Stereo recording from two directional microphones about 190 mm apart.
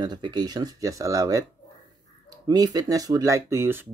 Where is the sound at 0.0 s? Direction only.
20° right (ahead or behind).